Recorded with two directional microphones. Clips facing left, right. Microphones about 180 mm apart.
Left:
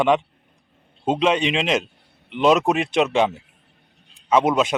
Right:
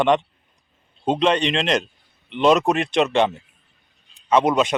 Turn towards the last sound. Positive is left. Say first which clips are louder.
# even
turn(degrees=0)  # may be behind; listen again after turning